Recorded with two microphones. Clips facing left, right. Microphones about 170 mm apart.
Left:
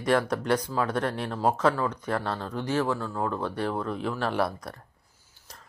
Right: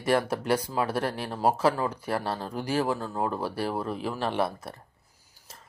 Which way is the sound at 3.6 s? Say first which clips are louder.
Left 1 dB; 5° right (ahead or behind).